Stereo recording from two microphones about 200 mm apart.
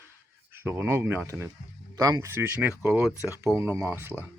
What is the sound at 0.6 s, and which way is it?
Speech, 10° right (ahead or behind).